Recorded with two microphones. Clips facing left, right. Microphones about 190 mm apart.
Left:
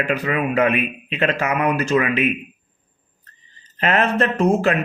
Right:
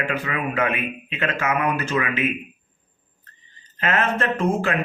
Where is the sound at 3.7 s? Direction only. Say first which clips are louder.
Left 4 dB; 35° left (ahead or behind).